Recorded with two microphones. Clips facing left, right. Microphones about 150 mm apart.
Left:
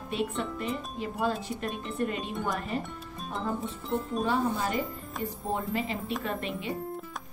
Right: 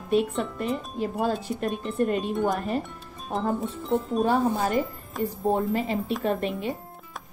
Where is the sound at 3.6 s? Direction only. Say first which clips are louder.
Right 5 dB; centre (ahead or behind).